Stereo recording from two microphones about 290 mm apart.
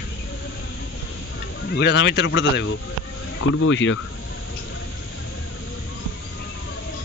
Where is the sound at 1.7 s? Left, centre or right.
Left.